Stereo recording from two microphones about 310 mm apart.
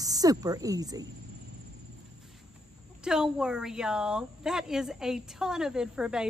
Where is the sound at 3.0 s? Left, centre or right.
Centre.